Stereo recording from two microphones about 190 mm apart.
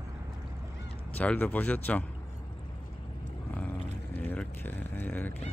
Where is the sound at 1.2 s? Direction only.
10° left (ahead or behind).